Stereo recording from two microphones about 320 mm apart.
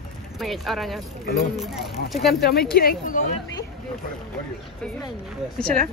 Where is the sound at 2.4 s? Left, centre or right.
Left.